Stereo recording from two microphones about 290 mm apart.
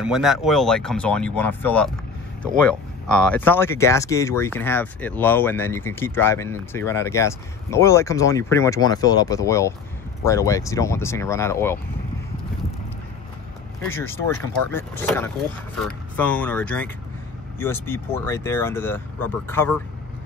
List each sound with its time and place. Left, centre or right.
0.0 s speech: centre
13.8 s speech: centre